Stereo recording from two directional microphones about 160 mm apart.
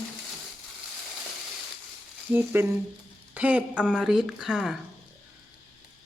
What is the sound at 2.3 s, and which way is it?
Speech, 15° right (ahead or behind).